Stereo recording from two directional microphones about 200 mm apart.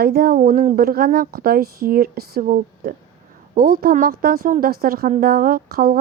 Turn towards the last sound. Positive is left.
turn(degrees=-50)  # may be behind; listen again after turning